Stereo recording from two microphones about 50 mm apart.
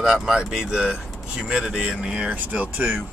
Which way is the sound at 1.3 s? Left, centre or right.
Centre.